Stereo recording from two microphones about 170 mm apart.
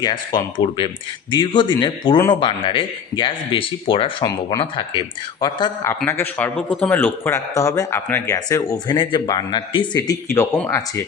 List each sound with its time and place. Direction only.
0.0 s speech: 25° left (ahead or behind)
10.3 s speech: 15° left (ahead or behind)